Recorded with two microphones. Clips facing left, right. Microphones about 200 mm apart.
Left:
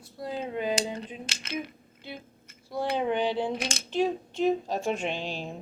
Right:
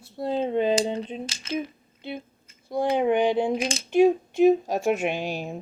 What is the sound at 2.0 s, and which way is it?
A woman's voice, 20° right (ahead or behind).